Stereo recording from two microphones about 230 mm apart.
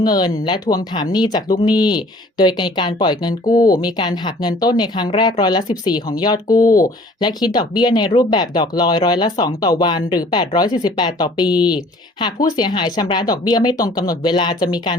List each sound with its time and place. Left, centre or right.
0.0 s speech: centre